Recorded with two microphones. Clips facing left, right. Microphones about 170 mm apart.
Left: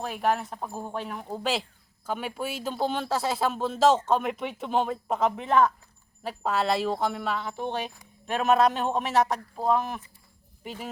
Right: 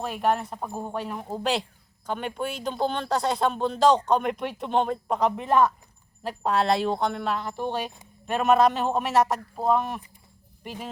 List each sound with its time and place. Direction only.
0.0 s speech: centre (ahead or behind)
0.7 s speech: 20° right (ahead or behind)
1.3 s speech: centre (ahead or behind)